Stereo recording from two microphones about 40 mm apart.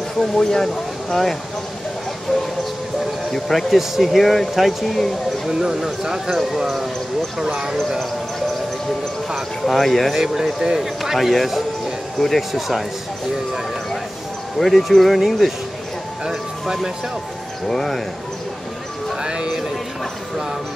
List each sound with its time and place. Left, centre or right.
0.2 s speech: centre
3.3 s speech: centre
5.5 s speech: centre
7.4 s speech: centre
9.8 s speech: centre
10.1 s speech: centre
10.8 s speech: centre
12.5 s speech: centre
14.6 s speech: centre
17.6 s speech: centre
19.2 s a sound: centre